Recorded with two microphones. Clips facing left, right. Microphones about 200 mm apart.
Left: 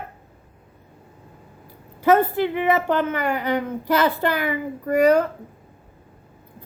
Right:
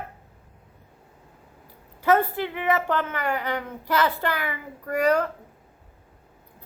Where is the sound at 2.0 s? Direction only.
20° left (ahead or behind).